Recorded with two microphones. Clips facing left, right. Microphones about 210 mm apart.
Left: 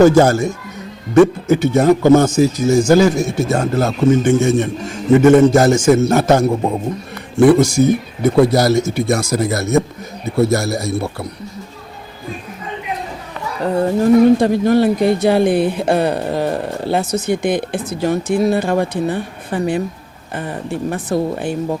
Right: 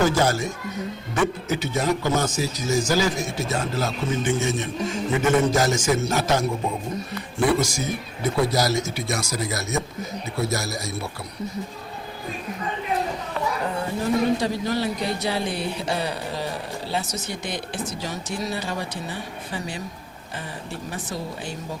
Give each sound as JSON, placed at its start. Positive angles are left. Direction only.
{"t": 0.2, "sound": "speech", "side_deg": 50}
{"t": 13.8, "sound": "speech", "side_deg": 50}